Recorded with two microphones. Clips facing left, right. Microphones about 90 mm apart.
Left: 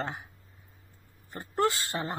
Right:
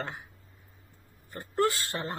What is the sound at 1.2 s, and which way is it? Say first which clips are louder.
Speech: even; 20° left (ahead or behind).